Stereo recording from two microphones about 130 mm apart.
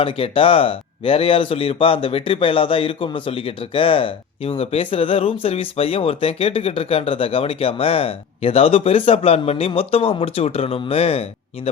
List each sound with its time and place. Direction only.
0.0 s speech: 45° left (ahead or behind)